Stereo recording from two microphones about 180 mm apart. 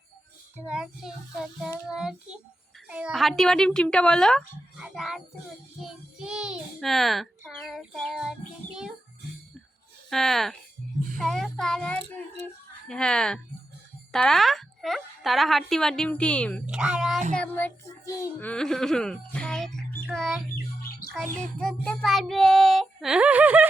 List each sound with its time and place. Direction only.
0.5 s a child's voice: 5° right (ahead or behind)
10.1 s a child's voice: centre (ahead or behind)
16.6 s a child's voice: 5° right (ahead or behind)
17.3 s a child's voice: 10° left (ahead or behind)
21.2 s a sound: 40° right (ahead or behind)
21.6 s a child's voice: 5° left (ahead or behind)